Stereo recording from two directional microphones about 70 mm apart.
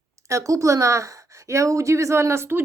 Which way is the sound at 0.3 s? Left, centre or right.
Right.